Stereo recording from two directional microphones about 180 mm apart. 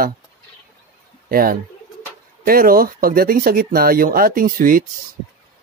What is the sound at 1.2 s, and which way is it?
Speech, 55° right (ahead or behind).